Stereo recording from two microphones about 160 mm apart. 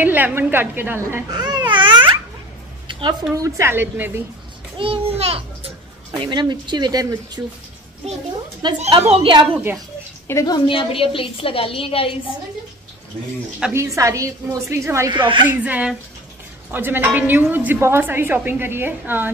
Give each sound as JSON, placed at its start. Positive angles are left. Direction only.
{"t": 0.0, "sound": "a woman's voice", "side_deg": -10}
{"t": 1.3, "sound": "babbling", "side_deg": -25}
{"t": 2.9, "sound": "a woman's voice", "side_deg": -30}
{"t": 4.7, "sound": "a child's voice", "side_deg": -35}
{"t": 6.1, "sound": "a woman's voice", "side_deg": -30}
{"t": 8.7, "sound": "a child's voice", "side_deg": -40}
{"t": 10.2, "sound": "a woman's voice", "side_deg": 20}
{"t": 13.7, "sound": "a woman's voice", "side_deg": -20}
{"t": 15.1, "sound": "speech", "side_deg": -30}
{"t": 15.4, "sound": "a woman's voice", "side_deg": -10}